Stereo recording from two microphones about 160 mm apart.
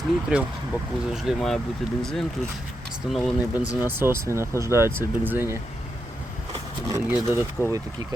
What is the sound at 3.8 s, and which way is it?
Speech, 15° right (ahead or behind).